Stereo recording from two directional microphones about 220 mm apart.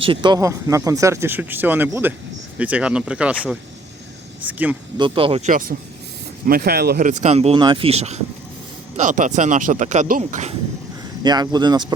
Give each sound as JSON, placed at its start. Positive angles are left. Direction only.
{"t": 0.0, "sound": "speech", "side_deg": -20}
{"t": 4.4, "sound": "speech", "side_deg": -5}
{"t": 4.9, "sound": "speech", "side_deg": -25}
{"t": 11.2, "sound": "speech", "side_deg": -20}